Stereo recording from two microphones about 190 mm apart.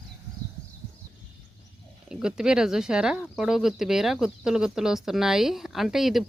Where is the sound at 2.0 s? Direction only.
5° right (ahead or behind).